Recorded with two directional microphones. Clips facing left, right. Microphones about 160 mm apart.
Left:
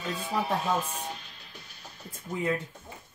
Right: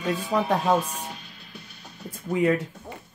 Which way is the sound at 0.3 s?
80° right.